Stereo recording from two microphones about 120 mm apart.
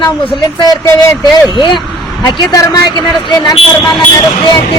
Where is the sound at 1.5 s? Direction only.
40° left (ahead or behind).